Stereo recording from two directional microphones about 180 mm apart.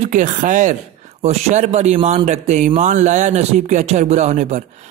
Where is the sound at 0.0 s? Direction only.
45° right (ahead or behind).